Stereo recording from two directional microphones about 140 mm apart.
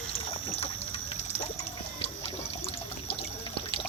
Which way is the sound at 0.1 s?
50° left (ahead or behind).